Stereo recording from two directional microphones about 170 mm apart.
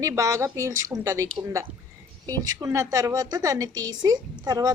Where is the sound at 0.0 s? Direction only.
20° right (ahead or behind).